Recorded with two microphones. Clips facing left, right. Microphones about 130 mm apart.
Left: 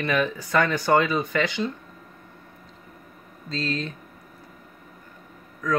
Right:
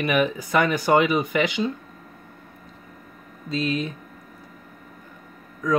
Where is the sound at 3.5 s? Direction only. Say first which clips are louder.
Right 4 dB; 15° right (ahead or behind).